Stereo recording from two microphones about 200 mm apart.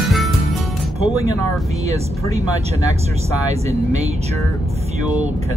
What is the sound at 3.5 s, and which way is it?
Speech, 30° right (ahead or behind).